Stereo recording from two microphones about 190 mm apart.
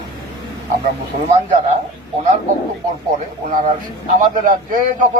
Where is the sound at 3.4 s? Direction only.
45° right (ahead or behind).